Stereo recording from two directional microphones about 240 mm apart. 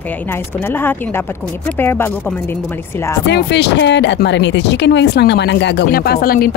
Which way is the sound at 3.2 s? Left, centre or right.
Left.